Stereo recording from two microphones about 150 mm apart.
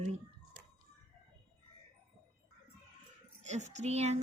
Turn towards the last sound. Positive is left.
turn(degrees=-45)  # may be behind; listen again after turning